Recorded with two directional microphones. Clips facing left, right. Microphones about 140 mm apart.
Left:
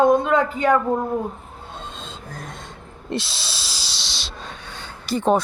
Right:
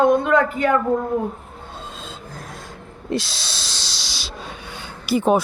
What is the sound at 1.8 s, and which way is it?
Filing, 5° right (ahead or behind).